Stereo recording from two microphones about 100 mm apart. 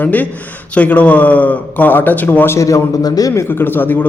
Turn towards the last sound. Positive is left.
turn(degrees=20)  # may be behind; listen again after turning